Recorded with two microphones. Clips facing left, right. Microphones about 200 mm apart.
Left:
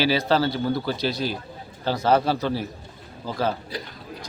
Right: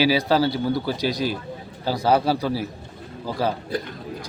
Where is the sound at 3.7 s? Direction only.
50° right (ahead or behind).